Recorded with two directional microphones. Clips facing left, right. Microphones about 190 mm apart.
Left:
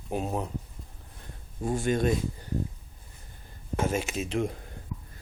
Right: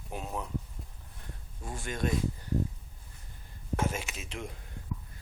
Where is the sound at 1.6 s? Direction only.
30° left (ahead or behind).